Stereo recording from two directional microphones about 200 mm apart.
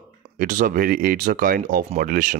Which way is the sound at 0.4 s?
45° right (ahead or behind).